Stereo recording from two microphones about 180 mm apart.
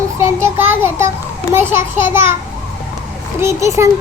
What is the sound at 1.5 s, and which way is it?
Child singing, 15° right (ahead or behind).